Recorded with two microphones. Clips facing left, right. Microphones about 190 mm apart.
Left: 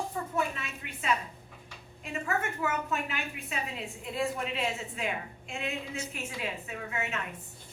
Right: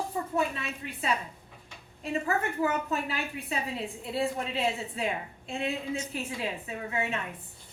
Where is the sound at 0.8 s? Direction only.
30° right (ahead or behind).